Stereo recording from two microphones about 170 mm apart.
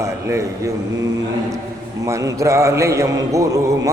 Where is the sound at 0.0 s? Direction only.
15° right (ahead or behind).